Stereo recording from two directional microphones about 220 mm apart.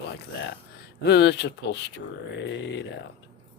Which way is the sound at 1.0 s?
50° left (ahead or behind).